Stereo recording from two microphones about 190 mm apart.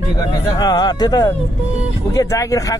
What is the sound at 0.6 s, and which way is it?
Speech, 20° left (ahead or behind).